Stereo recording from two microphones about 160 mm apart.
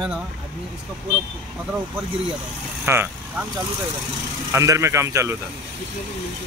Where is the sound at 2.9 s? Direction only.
15° right (ahead or behind).